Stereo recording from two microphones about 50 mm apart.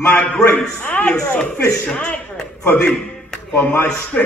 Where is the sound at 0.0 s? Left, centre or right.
Left.